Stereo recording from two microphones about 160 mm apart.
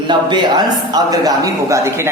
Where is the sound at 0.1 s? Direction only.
30° right (ahead or behind).